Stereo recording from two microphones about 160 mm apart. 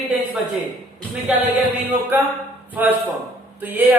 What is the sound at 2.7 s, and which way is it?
A man's voice, 10° right (ahead or behind).